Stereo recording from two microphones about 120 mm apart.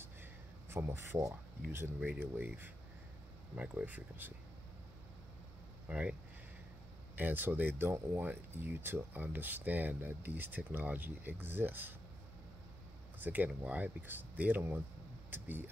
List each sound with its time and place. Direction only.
0.0 s a sound: 20° right (ahead or behind)
2.0 s speech: 15° right (ahead or behind)
5.9 s speech: 10° right (ahead or behind)
7.2 s speech: 15° right (ahead or behind)
13.2 s speech: 15° right (ahead or behind)